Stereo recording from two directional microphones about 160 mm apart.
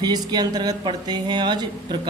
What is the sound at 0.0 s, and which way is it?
Speech, 25° right (ahead or behind).